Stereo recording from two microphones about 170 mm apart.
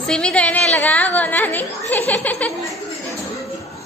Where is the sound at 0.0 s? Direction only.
5° left (ahead or behind).